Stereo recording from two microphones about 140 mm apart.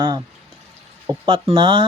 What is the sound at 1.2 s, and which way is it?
Speech, 40° right (ahead or behind).